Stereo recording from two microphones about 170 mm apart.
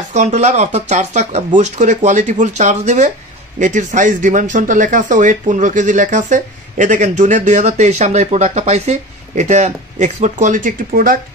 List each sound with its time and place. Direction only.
0.1 s speech: 45° right (ahead or behind)